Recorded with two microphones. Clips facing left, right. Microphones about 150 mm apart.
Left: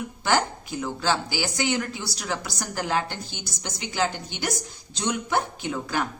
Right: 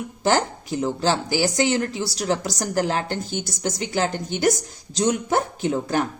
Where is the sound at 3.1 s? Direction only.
45° right (ahead or behind).